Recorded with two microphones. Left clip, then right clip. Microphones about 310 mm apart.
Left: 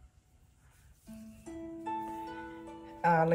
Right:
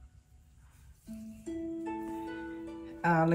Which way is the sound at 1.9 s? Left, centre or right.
Centre.